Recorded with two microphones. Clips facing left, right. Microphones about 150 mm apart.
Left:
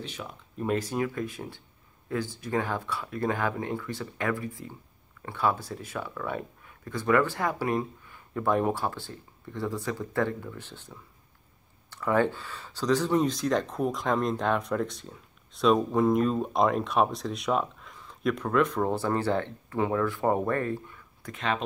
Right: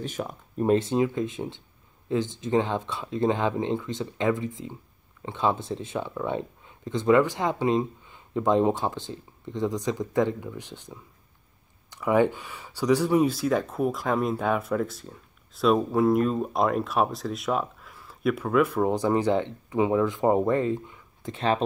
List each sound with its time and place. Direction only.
0.0 s speech: 45° right (ahead or behind)
0.7 s speech: 25° right (ahead or behind)